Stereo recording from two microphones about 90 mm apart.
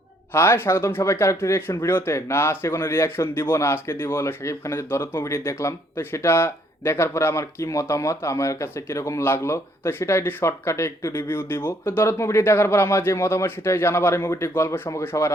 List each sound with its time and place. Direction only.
0.3 s speech: 25° left (ahead or behind)